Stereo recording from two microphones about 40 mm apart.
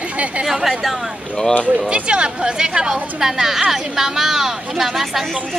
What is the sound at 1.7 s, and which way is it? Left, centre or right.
Speech, right.